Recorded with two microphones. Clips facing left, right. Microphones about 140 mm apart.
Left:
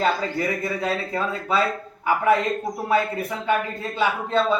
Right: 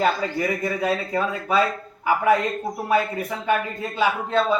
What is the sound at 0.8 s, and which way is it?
A man's voice, 15° right (ahead or behind).